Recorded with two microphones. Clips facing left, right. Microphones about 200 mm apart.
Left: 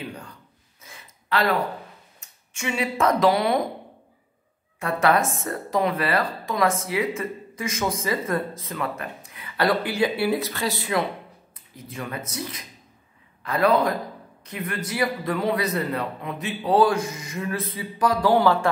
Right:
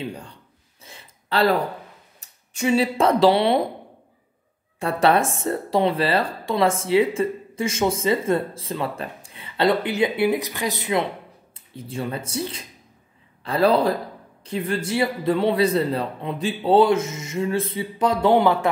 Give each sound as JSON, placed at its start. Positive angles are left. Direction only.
{"t": 0.0, "sound": "a sound", "side_deg": -30}
{"t": 0.8, "sound": "gasp", "side_deg": -30}
{"t": 2.1, "sound": "speech", "side_deg": -35}
{"t": 4.7, "sound": "a man's voice", "side_deg": -30}